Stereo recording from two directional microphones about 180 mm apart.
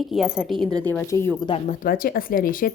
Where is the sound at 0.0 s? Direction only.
Centre (ahead or behind).